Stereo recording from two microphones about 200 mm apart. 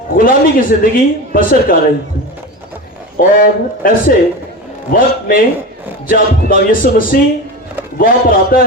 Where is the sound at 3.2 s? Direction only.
45° left (ahead or behind).